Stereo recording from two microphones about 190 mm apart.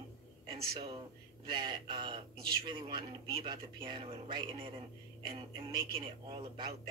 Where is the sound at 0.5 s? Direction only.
30° right (ahead or behind).